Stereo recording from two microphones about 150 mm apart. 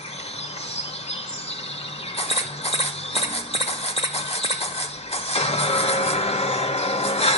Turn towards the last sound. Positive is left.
turn(degrees=40)  # may be behind; listen again after turning